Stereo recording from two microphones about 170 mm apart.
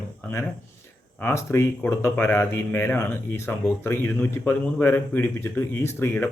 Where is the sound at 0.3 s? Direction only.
15° left (ahead or behind).